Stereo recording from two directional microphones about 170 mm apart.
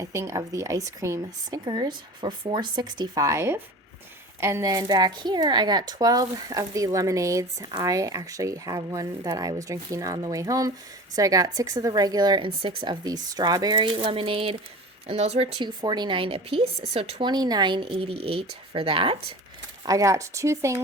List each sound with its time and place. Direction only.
0.0 s speech: 15° right (ahead or behind); by 15.7 s 35° right (ahead or behind)
15.8 s speech: 25° right (ahead or behind)
19.8 s speech: 20° right (ahead or behind)